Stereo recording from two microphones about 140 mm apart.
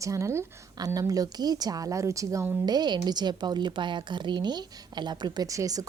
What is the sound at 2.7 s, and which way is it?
A woman's voice, 30° right (ahead or behind).